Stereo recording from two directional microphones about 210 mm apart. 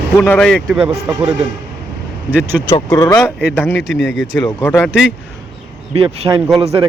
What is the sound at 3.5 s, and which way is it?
Speech, 5° left (ahead or behind).